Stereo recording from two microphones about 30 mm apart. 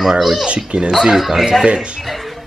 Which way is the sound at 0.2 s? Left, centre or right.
Centre.